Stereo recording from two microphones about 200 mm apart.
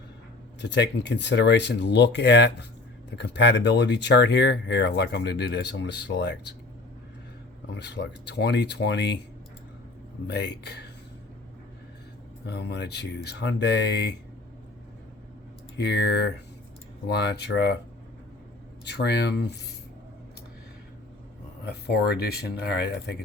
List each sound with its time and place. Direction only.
0.6 s speech: 60° left (ahead or behind)
7.8 s speech: 55° left (ahead or behind)
10.2 s speech: 55° left (ahead or behind)
12.5 s speech: 55° left (ahead or behind)
15.8 s speech: 55° left (ahead or behind)
18.9 s speech: 55° left (ahead or behind)
21.7 s speech: 55° left (ahead or behind)